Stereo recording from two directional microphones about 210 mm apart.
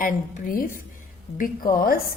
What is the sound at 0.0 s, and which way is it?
A woman's voice, 40° left (ahead or behind).